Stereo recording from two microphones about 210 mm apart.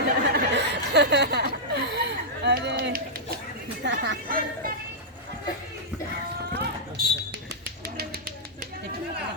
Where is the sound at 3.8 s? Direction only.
55° right (ahead or behind).